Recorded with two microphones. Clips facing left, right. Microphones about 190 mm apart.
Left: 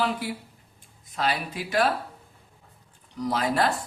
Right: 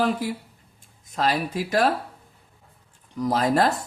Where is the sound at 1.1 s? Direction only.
40° right (ahead or behind).